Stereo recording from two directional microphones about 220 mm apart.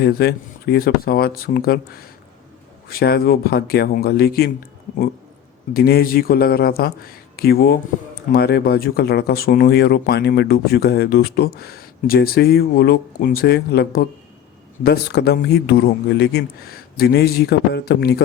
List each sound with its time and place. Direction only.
0.0 s speech: 45° left (ahead or behind)
5.7 s speech: 45° left (ahead or behind)